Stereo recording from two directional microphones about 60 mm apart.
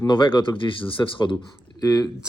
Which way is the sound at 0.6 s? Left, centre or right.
Left.